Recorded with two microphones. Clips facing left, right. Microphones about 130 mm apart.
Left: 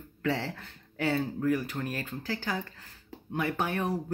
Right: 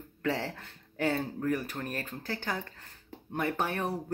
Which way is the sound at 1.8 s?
45° right (ahead or behind).